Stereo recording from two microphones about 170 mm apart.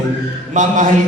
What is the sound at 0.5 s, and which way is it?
Speech, 50° right (ahead or behind).